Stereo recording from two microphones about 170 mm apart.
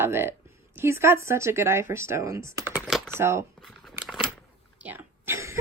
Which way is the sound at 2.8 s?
Centre (ahead or behind).